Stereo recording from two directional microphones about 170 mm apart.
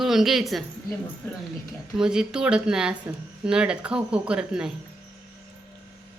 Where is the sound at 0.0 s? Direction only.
Centre (ahead or behind).